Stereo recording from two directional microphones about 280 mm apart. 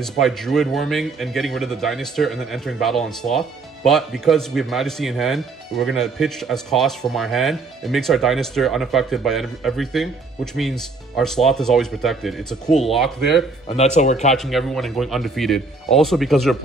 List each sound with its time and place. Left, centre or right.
0.0 s a man's voice: centre
13.7 s speech: left
14.3 s a man's voice: centre